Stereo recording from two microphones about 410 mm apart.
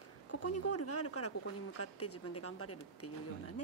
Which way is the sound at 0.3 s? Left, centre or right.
Left.